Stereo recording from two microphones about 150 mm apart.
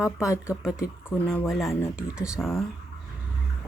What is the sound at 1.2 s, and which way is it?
Speech, 10° left (ahead or behind).